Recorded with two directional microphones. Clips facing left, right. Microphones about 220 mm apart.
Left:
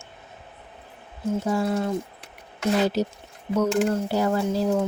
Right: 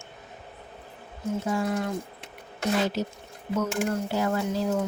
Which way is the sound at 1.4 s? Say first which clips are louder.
Left 3 dB; 35° left (ahead or behind).